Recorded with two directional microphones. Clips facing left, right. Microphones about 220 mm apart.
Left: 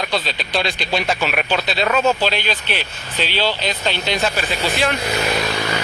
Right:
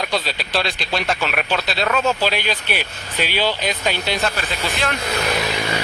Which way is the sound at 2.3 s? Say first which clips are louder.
Even; 10° right (ahead or behind).